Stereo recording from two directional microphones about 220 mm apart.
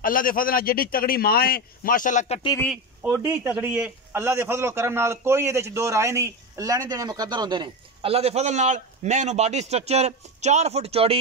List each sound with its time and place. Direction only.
0.0 s a man's voice: 40° left (ahead or behind)
3.2 s a man's voice: 10° right (ahead or behind); by 11.1 s 25° right (ahead or behind)